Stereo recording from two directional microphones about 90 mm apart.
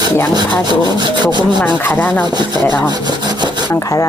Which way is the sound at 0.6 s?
55° right (ahead or behind).